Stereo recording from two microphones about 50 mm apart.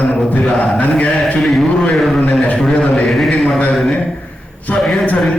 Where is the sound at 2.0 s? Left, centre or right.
Centre.